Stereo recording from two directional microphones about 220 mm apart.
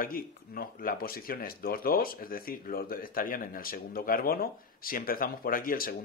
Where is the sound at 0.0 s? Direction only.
40° left (ahead or behind).